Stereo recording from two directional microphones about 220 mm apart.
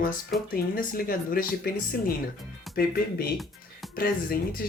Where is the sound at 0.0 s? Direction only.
40° left (ahead or behind).